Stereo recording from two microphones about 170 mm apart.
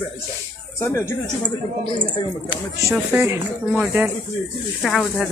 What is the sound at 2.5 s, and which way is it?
Speech, 15° right (ahead or behind).